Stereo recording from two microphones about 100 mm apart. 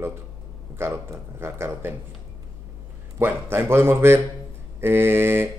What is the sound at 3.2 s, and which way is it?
Speech, 25° right (ahead or behind).